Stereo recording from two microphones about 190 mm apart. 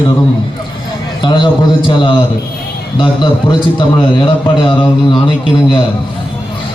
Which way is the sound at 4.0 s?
25° left (ahead or behind).